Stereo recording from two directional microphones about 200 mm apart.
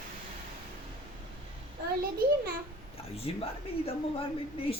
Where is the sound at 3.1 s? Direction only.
30° left (ahead or behind).